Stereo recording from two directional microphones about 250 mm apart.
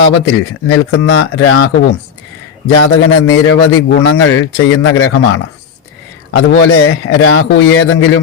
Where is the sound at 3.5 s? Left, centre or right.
Left.